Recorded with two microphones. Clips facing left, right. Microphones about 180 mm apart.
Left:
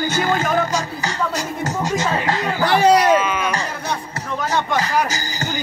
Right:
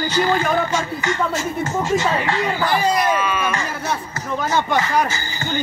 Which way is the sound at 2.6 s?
75° left (ahead or behind).